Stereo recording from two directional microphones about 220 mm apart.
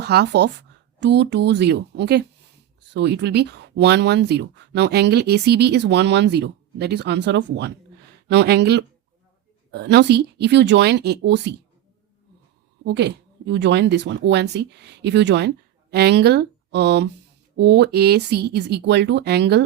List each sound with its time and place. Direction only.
0.0 s speech: 50° right (ahead or behind)
12.8 s speech: 50° right (ahead or behind)